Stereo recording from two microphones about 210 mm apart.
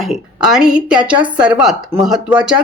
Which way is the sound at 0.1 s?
5° right (ahead or behind).